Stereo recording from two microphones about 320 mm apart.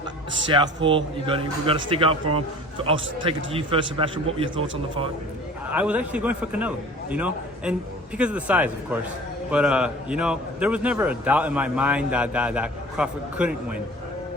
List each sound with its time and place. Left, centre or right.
0.5 s a man's voice: centre
4.5 s speech: right
5.7 s a man's voice: centre